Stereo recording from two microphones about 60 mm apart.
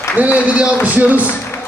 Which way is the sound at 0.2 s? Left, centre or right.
Right.